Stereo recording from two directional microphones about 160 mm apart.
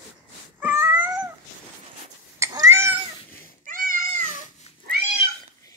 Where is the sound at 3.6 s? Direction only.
55° right (ahead or behind).